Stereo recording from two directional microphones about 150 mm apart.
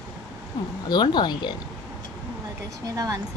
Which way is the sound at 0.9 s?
30° left (ahead or behind).